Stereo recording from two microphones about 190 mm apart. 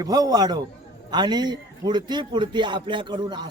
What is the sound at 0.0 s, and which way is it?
A man's voice, 20° right (ahead or behind).